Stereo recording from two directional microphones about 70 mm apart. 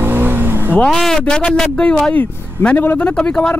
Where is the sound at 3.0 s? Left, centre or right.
Centre.